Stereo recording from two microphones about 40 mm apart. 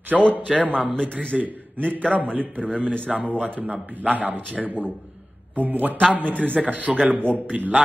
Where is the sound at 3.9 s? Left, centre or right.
Right.